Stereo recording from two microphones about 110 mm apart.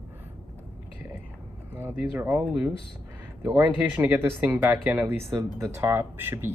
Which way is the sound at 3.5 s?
15° right (ahead or behind).